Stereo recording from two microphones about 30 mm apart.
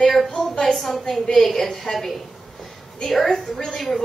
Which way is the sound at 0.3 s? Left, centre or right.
Centre.